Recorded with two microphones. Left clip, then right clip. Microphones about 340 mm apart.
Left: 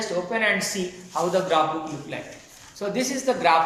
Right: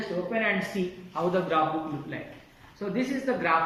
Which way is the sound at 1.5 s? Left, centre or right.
Centre.